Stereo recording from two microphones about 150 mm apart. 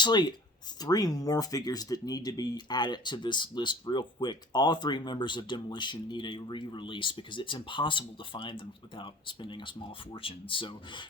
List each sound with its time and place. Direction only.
0.0 s speech: 30° left (ahead or behind)